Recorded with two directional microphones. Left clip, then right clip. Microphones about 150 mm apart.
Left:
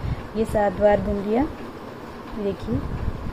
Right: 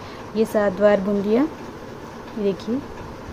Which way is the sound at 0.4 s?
25° right (ahead or behind).